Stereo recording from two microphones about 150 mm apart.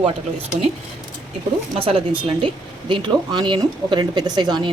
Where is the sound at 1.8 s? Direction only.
35° right (ahead or behind).